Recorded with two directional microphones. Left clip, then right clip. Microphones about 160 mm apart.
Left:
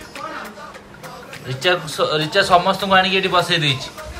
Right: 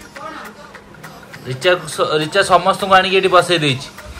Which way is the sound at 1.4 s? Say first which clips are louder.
Right 3 dB; 10° left (ahead or behind).